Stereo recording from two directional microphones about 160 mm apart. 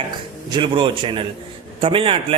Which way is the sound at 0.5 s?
30° right (ahead or behind).